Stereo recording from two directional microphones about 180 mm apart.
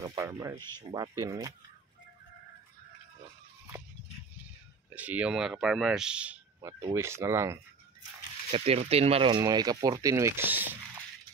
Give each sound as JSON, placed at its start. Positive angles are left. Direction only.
{"t": 0.0, "sound": "speech", "side_deg": -20}
{"t": 4.9, "sound": "speech", "side_deg": -10}
{"t": 8.5, "sound": "speech", "side_deg": -35}